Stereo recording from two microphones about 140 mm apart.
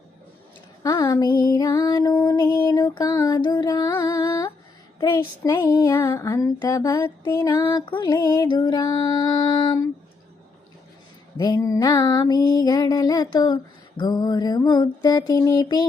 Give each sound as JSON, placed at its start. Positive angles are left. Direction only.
{"t": 0.8, "sound": "female singing", "side_deg": 25}
{"t": 11.3, "sound": "female singing", "side_deg": 30}